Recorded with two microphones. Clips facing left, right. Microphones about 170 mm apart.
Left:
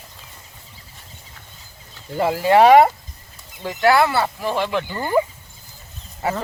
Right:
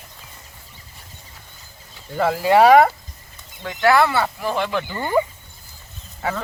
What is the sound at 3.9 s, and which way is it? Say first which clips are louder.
Speech: even; 20° left (ahead or behind).